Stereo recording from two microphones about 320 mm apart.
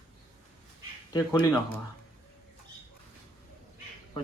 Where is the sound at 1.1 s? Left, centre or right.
Centre.